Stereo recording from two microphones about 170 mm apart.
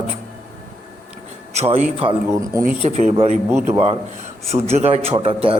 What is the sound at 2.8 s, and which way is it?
Speech, 40° right (ahead or behind).